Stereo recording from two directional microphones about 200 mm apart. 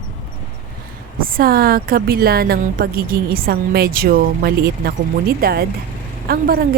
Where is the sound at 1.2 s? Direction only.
50° right (ahead or behind).